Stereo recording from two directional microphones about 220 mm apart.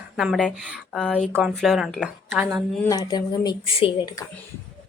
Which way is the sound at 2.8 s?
15° left (ahead or behind).